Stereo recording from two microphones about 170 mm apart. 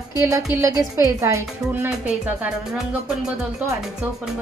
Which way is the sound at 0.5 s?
15° right (ahead or behind).